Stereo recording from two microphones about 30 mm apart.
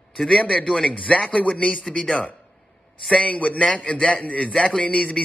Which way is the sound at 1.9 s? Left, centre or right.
Centre.